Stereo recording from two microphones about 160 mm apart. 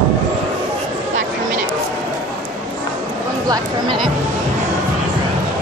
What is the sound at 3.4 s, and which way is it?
Speech, 25° right (ahead or behind).